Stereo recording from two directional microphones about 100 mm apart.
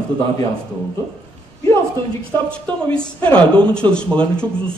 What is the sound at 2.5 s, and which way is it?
Speech, 10° left (ahead or behind).